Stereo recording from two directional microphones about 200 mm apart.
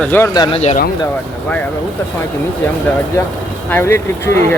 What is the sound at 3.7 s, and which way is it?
Speech, 10° left (ahead or behind).